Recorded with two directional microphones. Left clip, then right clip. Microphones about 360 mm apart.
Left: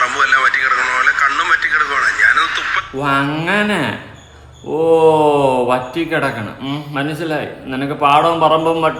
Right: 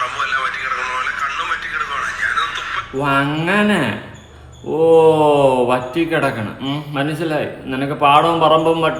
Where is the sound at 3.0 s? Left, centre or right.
Centre.